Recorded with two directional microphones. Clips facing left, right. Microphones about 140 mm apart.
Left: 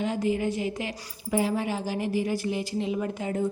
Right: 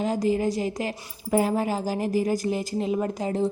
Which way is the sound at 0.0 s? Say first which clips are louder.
Right 3 dB; 40° right (ahead or behind).